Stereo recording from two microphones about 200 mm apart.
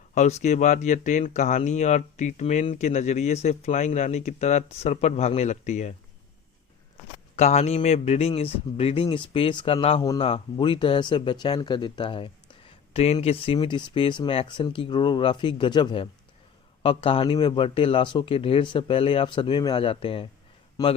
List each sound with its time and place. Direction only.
0.1 s speech: 35° left (ahead or behind)
7.3 s speech: 35° left (ahead or behind)
10.0 s a man's voice: 15° left (ahead or behind)